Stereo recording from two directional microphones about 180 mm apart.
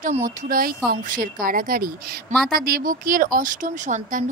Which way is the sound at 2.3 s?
5° left (ahead or behind).